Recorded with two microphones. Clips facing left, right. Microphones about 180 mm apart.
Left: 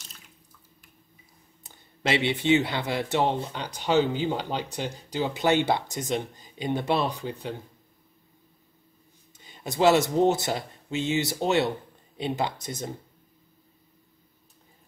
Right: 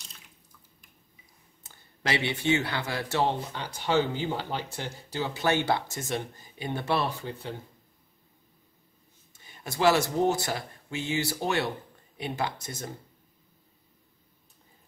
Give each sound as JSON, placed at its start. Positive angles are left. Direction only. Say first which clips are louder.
{"t": 1.7, "sound": "speech", "louder": "left 4 dB", "side_deg": 20}
{"t": 9.4, "sound": "speech", "louder": "left 3 dB", "side_deg": 20}